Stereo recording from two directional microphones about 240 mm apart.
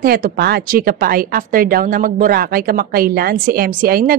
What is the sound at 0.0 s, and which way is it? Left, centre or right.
A woman's voice, right.